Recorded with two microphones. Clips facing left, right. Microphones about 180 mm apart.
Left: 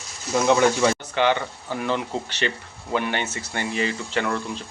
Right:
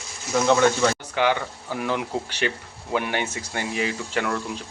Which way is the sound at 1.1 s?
10° right (ahead or behind).